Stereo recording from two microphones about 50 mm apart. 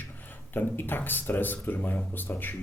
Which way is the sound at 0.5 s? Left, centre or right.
Left.